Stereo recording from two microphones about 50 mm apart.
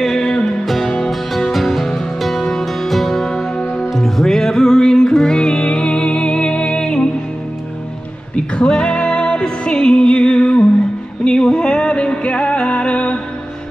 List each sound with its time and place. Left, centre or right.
0.0 s music: centre
1.5 s music: centre
8.5 s music: centre